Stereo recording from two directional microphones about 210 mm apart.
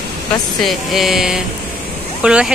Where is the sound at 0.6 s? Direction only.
Centre (ahead or behind).